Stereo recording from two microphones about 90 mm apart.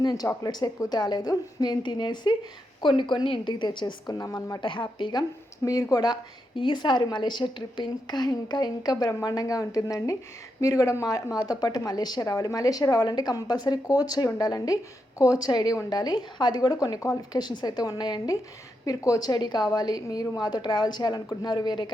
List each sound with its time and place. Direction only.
0.0 s a woman's voice: 45° left (ahead or behind); by 4.1 s 60° left (ahead or behind)
4.1 s speech: 40° left (ahead or behind)
4.6 s a woman's voice: 65° left (ahead or behind)
5.6 s speech: 40° left (ahead or behind)
6.6 s a woman's voice: 60° left (ahead or behind)
18.9 s a woman's voice: 40° left (ahead or behind)